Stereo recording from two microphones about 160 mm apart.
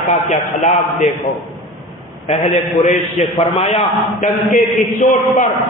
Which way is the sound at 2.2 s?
45° left (ahead or behind).